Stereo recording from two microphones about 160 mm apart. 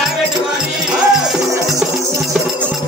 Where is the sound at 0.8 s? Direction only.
5° right (ahead or behind).